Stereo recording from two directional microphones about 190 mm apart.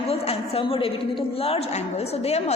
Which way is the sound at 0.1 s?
30° left (ahead or behind).